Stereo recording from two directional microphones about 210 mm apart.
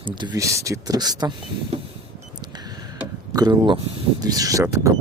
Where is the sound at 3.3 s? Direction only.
15° right (ahead or behind).